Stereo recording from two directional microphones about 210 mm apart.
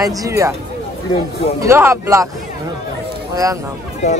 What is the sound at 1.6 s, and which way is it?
Speech, 10° right (ahead or behind).